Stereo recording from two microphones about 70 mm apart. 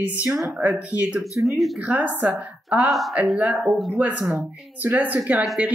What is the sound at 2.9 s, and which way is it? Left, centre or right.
Speech, centre.